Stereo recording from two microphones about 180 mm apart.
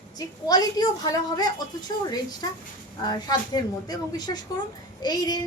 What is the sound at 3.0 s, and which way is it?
A woman's voice, 25° left (ahead or behind).